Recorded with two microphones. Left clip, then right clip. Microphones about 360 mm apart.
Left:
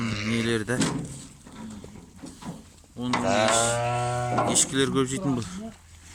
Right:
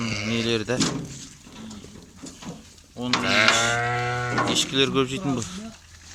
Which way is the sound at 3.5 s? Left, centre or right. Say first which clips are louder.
Right 2 dB; centre.